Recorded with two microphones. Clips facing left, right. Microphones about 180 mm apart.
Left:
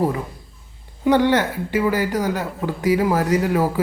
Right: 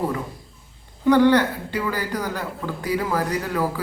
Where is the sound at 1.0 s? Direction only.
20° left (ahead or behind).